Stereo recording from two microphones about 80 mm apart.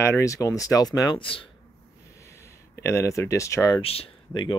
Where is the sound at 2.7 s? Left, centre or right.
Left.